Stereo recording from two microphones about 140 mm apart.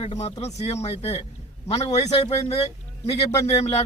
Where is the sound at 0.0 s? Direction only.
50° left (ahead or behind).